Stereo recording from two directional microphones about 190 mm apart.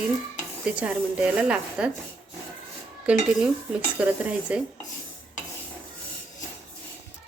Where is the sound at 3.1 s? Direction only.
5° right (ahead or behind).